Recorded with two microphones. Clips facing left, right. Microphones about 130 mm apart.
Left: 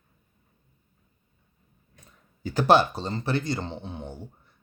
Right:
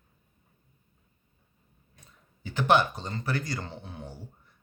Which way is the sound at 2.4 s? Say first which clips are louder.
Left 4 dB; 35° left (ahead or behind).